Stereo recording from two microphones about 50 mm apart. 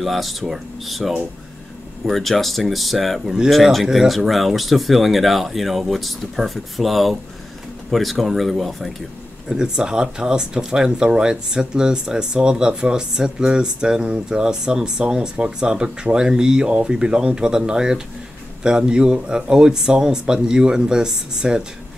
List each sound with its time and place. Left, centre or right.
0.0 s speech: centre
9.5 s speech: centre